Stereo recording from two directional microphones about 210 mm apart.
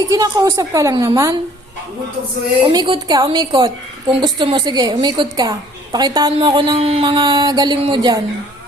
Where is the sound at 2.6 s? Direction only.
25° right (ahead or behind).